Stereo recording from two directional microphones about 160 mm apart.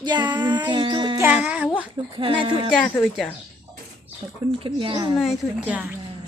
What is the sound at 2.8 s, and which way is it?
Speech, centre (ahead or behind).